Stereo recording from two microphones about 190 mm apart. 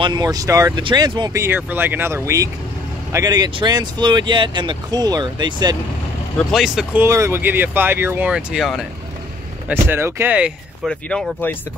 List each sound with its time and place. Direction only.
0.0 s speech: 20° right (ahead or behind)
6.3 s speech: centre (ahead or behind)
9.7 s speech: 10° right (ahead or behind)
10.9 s speech: 5° left (ahead or behind)